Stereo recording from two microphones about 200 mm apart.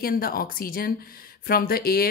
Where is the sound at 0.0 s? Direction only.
45° left (ahead or behind).